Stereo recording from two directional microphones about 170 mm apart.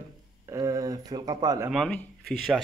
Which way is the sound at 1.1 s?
25° right (ahead or behind).